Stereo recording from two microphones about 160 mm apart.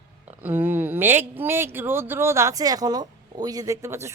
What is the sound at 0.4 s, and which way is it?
A woman's voice, 10° right (ahead or behind).